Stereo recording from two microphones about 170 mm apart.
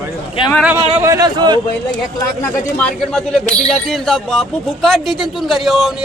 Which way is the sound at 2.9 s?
5° left (ahead or behind).